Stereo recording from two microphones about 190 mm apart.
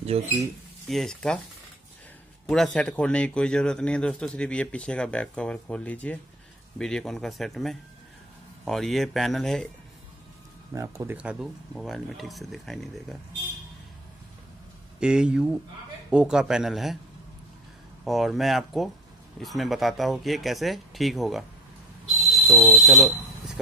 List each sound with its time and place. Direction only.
0.1 s speech: 30° right (ahead or behind)
0.8 s a man's voice: centre (ahead or behind)
2.4 s a man's voice: centre (ahead or behind)
10.7 s a man's voice: 15° right (ahead or behind); by 13.2 s centre (ahead or behind)
15.0 s a man's voice: 5° right (ahead or behind)
18.0 s a man's voice: centre (ahead or behind)
22.0 s buzzer: 5° left (ahead or behind)